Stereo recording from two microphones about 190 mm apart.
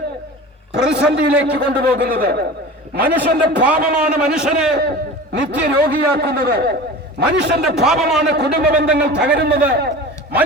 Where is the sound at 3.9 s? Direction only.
5° right (ahead or behind).